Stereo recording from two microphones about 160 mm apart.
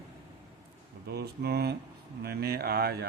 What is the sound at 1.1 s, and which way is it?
Speech, 85° right.